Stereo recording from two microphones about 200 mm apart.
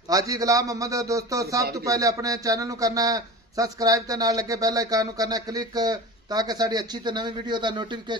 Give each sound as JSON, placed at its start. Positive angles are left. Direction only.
{"t": 0.1, "sound": "a man's voice", "side_deg": -15}